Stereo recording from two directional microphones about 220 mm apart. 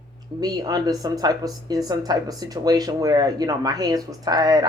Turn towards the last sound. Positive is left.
turn(degrees=-15)  # may be behind; listen again after turning